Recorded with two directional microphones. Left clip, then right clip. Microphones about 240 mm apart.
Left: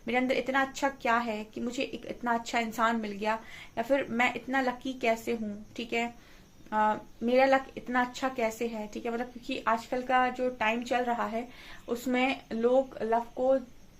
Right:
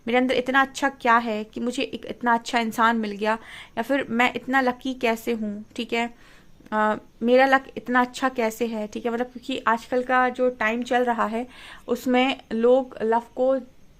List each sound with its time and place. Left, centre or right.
0.0 s speech: right